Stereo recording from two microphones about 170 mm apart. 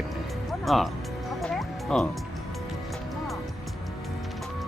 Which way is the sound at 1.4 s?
Centre (ahead or behind).